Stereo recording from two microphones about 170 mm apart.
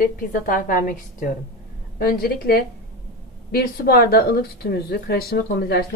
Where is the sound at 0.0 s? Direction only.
55° left (ahead or behind).